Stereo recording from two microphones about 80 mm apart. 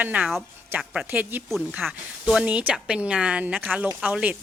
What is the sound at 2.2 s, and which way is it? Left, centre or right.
A woman's voice, centre.